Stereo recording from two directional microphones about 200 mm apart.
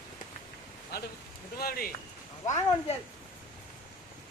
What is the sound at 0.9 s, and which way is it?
Speech, 55° left (ahead or behind).